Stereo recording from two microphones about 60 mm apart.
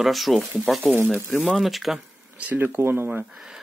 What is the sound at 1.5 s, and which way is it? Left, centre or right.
Speech, centre.